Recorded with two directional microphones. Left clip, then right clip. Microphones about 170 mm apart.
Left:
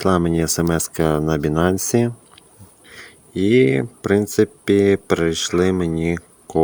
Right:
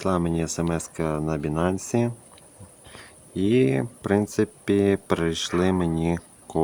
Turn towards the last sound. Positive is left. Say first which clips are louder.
# left 6 dB
turn(degrees=15)  # may be behind; listen again after turning